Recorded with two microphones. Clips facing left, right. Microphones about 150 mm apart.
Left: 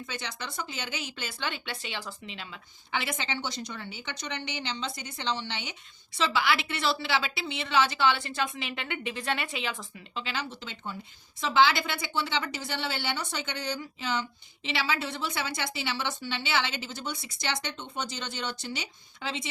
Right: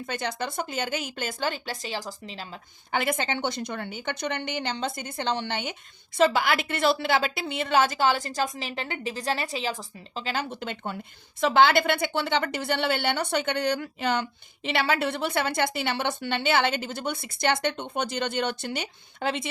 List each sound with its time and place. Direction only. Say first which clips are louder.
0.0 s a woman's voice: right 8 dB; 50° right (ahead or behind)